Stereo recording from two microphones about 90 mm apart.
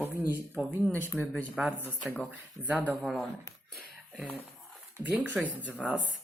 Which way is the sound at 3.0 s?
Centre (ahead or behind).